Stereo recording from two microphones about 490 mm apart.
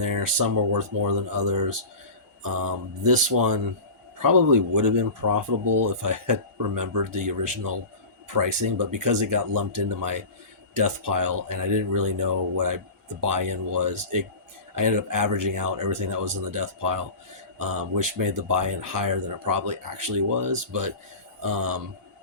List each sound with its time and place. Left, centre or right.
0.0 s speech: right